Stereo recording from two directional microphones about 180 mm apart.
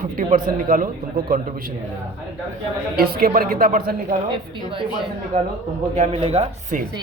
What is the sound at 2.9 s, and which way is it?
A man's voice, 55° right (ahead or behind).